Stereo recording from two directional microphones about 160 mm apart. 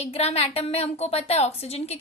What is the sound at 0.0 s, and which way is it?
A woman's voice, 40° left (ahead or behind).